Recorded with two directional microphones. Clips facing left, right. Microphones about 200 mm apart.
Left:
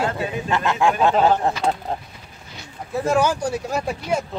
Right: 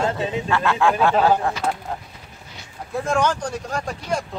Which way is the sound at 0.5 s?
20° left (ahead or behind).